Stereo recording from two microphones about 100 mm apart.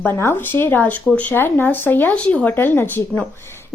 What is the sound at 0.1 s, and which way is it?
A woman's voice, 25° left (ahead or behind).